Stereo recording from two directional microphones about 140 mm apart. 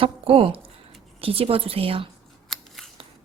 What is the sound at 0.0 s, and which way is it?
Speech, 40° right (ahead or behind).